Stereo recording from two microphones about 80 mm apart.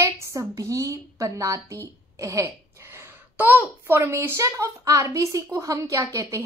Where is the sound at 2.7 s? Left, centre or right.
Right.